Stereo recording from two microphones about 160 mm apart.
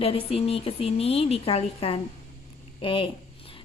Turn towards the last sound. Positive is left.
turn(degrees=35)  # may be behind; listen again after turning